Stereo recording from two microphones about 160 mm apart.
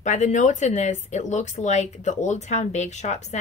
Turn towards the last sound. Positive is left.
turn(degrees=45)  # may be behind; listen again after turning